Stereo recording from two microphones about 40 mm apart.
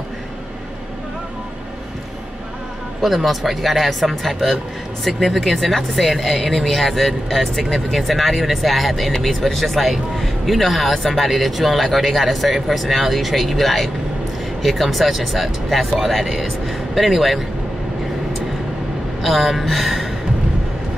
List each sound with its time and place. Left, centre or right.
3.0 s speech: centre
19.2 s speech: centre